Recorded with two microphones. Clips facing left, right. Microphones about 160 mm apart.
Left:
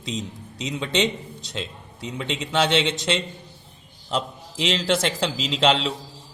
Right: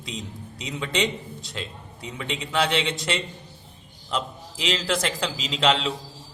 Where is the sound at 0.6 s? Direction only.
25° left (ahead or behind).